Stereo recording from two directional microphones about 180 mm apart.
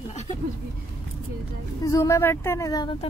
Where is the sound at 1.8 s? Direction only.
15° left (ahead or behind).